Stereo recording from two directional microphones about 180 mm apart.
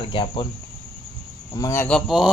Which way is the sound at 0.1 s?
30° left (ahead or behind).